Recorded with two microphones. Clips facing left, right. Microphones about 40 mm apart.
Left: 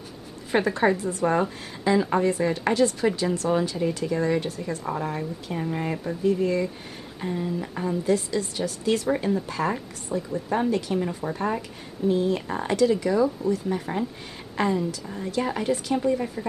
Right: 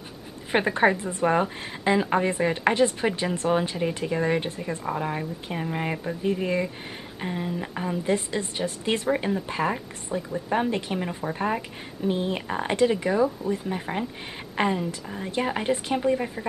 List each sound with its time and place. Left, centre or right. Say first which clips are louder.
0.5 s a woman's voice: even; right